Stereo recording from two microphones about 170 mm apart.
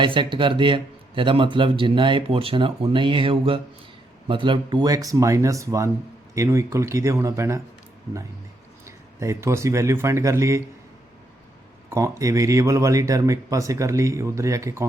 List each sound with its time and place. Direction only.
0.0 s speech: 30° right (ahead or behind)
9.2 s speech: 15° right (ahead or behind)
11.9 s speech: 15° right (ahead or behind)